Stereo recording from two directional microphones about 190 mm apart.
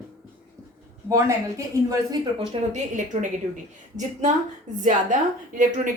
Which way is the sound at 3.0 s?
40° right (ahead or behind).